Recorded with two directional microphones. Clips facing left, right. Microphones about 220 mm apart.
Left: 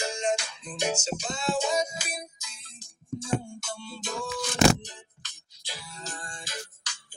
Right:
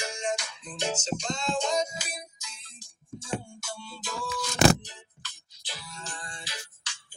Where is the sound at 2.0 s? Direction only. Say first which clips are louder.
Left 3 dB; 50° left (ahead or behind).